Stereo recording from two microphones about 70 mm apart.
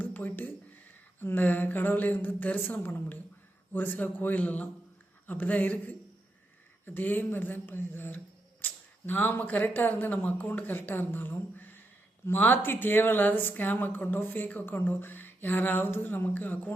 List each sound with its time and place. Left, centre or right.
0.0 s speech: left